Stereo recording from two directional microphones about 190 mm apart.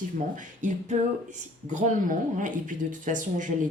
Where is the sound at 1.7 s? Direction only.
40° right (ahead or behind).